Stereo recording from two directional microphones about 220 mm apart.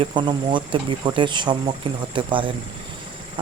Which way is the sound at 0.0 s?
20° right (ahead or behind).